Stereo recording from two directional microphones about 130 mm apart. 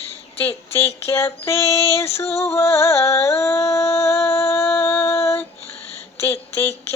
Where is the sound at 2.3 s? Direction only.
20° left (ahead or behind).